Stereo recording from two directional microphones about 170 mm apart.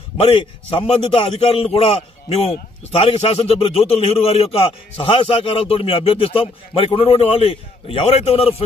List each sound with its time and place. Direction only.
0.2 s a man's voice: 35° left (ahead or behind)